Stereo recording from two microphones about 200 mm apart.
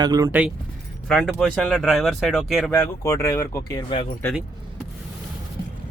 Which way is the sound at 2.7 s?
15° left (ahead or behind).